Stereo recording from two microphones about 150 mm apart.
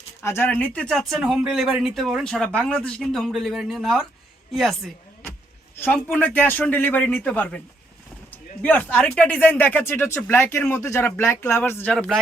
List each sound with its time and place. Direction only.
0.2 s speech: 15° left (ahead or behind); by 5.3 s centre (ahead or behind)
5.7 s speech: 15° left (ahead or behind)
11.9 s speech: centre (ahead or behind)